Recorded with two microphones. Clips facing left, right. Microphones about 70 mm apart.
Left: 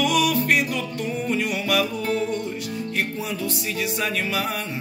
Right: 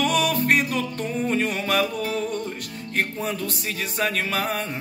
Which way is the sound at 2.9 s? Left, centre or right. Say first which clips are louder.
Right 4 dB; right.